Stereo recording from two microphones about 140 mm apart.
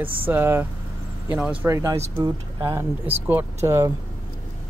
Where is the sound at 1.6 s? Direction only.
20° right (ahead or behind).